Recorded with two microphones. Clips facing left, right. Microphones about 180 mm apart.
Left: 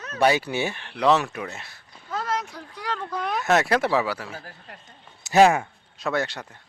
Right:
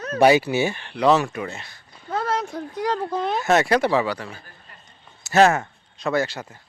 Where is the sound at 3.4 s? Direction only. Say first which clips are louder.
Right 2 dB; centre (ahead or behind).